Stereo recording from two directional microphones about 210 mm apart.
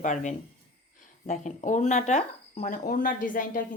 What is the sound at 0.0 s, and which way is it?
Speech, 35° left (ahead or behind).